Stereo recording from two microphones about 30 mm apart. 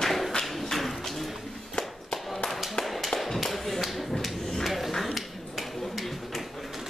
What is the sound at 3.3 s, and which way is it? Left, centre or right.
Clapping, centre.